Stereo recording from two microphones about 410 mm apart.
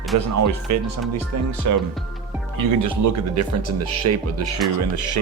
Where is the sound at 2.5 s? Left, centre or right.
Right.